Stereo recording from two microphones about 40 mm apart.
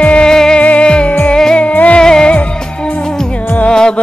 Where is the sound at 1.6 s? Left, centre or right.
Left.